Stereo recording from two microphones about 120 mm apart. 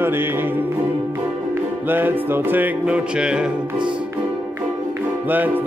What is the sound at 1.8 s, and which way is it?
Music, 15° right (ahead or behind).